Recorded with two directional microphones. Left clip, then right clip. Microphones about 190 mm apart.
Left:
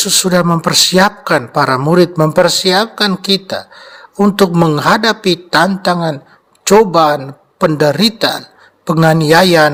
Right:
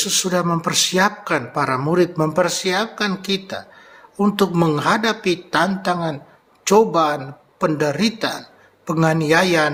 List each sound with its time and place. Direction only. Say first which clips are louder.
0.0 s a man's voice: left 7 dB; 45° left (ahead or behind)